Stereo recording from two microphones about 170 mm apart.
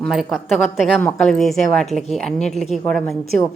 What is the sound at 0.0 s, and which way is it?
Speech, centre (ahead or behind).